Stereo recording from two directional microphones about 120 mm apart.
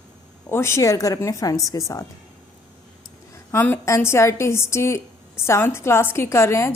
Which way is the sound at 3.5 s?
20° left (ahead or behind).